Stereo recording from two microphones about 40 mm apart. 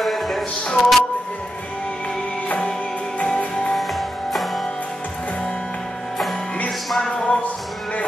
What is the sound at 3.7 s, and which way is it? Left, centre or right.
Music, centre.